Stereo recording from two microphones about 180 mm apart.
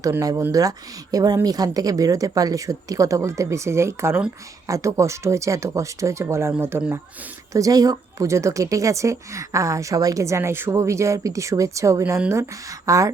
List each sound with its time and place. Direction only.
0.0 s speech: 20° right (ahead or behind)